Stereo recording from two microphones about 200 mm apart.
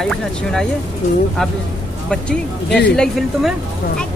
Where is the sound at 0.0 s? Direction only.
5° left (ahead or behind).